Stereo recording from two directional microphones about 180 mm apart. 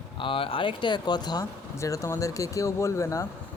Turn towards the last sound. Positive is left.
turn(degrees=15)  # may be behind; listen again after turning